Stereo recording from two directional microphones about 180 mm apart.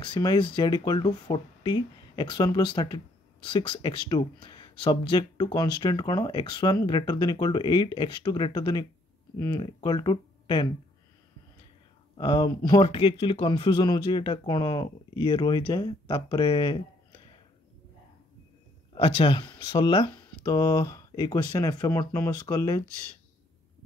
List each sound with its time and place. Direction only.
0.0 s speech: 25° left (ahead or behind)
12.2 s speech: 20° left (ahead or behind)
18.9 s speech: 30° left (ahead or behind)